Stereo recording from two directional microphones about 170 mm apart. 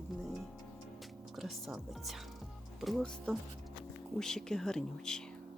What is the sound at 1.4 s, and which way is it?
Speech, centre (ahead or behind).